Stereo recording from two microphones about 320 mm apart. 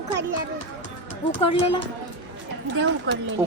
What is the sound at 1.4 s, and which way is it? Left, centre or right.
Speech, centre.